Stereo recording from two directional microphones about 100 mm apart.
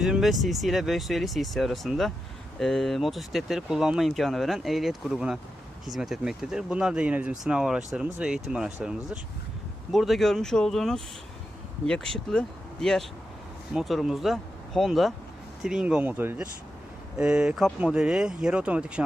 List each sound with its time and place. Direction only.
0.0 s speech: centre (ahead or behind); by 16.5 s 20° right (ahead or behind)
17.2 s speech: 10° right (ahead or behind)